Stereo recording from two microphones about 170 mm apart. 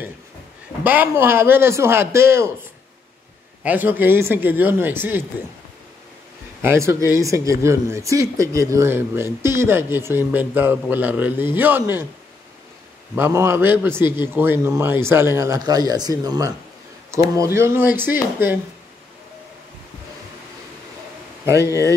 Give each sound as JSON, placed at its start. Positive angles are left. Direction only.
{"t": 0.8, "sound": "speech", "side_deg": -10}
{"t": 3.6, "sound": "speech", "side_deg": -10}
{"t": 6.6, "sound": "speech", "side_deg": -15}
{"t": 13.1, "sound": "speech", "side_deg": -15}